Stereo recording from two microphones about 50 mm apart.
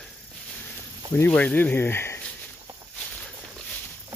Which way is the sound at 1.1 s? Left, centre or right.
Left.